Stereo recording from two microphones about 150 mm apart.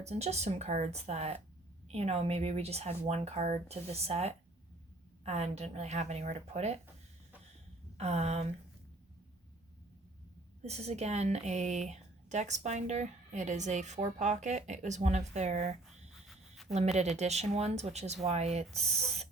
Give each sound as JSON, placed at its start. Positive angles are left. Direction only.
{"t": 0.0, "sound": "speech", "side_deg": -45}
{"t": 7.9, "sound": "speech", "side_deg": -45}
{"t": 10.6, "sound": "speech", "side_deg": -45}